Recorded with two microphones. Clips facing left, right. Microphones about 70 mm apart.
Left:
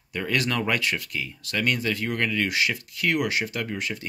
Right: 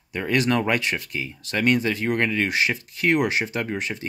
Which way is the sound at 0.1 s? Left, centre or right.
Centre.